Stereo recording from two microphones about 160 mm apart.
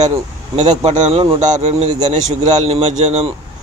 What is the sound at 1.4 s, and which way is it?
A man's voice, 45° right (ahead or behind).